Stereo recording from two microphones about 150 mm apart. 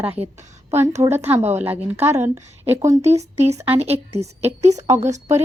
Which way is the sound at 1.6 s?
15° right (ahead or behind).